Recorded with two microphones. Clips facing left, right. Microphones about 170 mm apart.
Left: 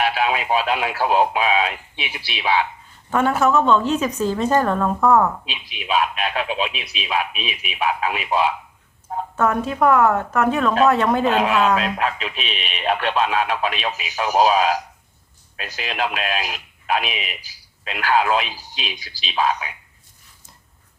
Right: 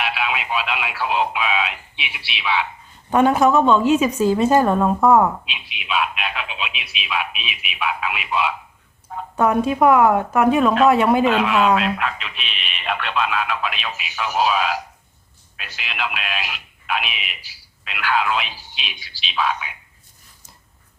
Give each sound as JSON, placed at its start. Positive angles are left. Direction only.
{"t": 0.0, "sound": "speech", "side_deg": 40}
{"t": 3.1, "sound": "a woman's voice", "side_deg": -15}
{"t": 5.5, "sound": "speech", "side_deg": 40}
{"t": 9.3, "sound": "a woman's voice", "side_deg": -15}
{"t": 11.3, "sound": "speech", "side_deg": 40}
{"t": 11.5, "sound": "a woman's voice", "side_deg": -10}
{"t": 11.8, "sound": "speech", "side_deg": 40}